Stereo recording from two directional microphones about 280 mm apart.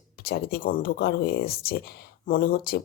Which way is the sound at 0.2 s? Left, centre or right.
Left.